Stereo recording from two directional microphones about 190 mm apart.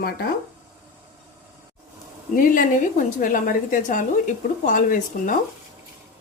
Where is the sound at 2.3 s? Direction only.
45° left (ahead or behind).